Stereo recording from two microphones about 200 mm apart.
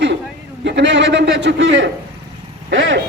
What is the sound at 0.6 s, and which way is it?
A man's voice, 60° right (ahead or behind).